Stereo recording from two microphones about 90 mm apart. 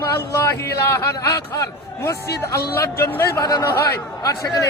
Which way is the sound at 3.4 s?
45° left (ahead or behind).